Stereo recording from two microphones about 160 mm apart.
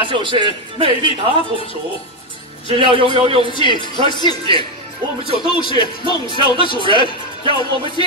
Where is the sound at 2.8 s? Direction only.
35° right (ahead or behind).